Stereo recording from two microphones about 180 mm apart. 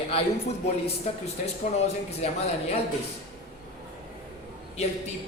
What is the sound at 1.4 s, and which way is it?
A man's voice, 35° left (ahead or behind).